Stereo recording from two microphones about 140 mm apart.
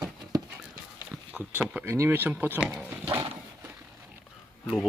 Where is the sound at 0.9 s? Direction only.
15° right (ahead or behind).